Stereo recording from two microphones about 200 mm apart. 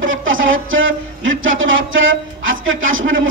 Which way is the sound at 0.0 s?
75° right (ahead or behind).